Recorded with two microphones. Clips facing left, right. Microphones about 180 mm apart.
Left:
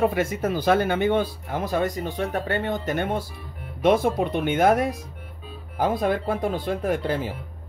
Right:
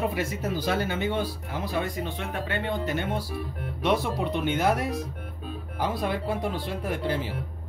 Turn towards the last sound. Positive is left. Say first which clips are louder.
# left 4 dB
turn(degrees=50)  # may be behind; listen again after turning